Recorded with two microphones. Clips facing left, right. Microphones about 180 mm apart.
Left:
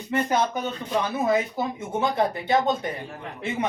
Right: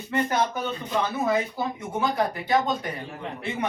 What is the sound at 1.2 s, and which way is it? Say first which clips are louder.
Speech: left 2 dB; 20° left (ahead or behind).